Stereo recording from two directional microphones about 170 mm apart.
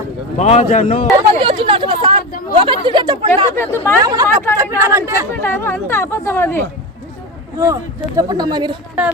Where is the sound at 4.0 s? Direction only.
20° right (ahead or behind).